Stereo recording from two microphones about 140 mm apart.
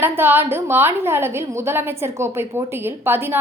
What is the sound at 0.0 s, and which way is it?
A woman's voice, 15° right (ahead or behind).